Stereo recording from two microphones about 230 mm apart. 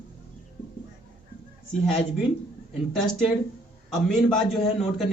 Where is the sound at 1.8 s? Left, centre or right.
Centre.